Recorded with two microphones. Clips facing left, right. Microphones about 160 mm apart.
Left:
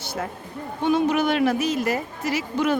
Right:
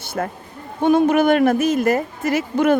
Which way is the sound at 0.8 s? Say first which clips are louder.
Right 6 dB; 50° right (ahead or behind).